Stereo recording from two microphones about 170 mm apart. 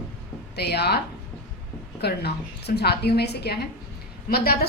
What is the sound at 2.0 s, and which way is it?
A woman's voice, 75° left (ahead or behind).